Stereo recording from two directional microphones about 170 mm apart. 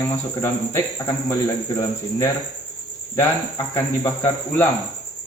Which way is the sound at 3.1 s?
15° left (ahead or behind).